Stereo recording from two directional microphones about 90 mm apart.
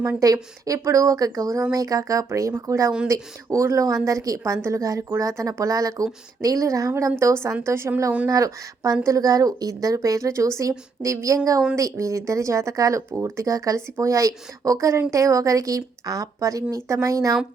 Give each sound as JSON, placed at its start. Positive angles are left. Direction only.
{"t": 0.2, "sound": "a woman's voice", "side_deg": -40}